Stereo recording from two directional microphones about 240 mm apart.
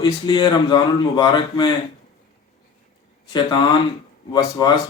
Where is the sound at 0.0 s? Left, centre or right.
Centre.